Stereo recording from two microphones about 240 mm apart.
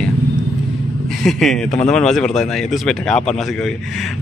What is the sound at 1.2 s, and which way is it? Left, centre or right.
Speech, centre.